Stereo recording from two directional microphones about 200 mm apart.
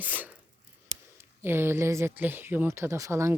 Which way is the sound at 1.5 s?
10° right (ahead or behind).